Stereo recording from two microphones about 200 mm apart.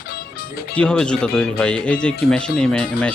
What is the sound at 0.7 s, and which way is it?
Speech, 5° left (ahead or behind).